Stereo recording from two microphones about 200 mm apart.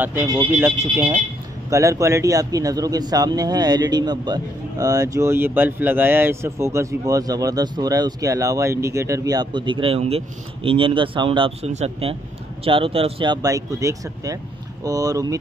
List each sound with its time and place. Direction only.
0.0 s speech: 10° right (ahead or behind)